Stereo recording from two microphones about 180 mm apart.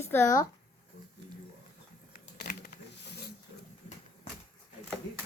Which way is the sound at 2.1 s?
55° left (ahead or behind).